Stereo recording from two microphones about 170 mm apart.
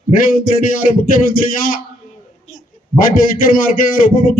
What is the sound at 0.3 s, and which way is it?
A man's voice, 55° left (ahead or behind).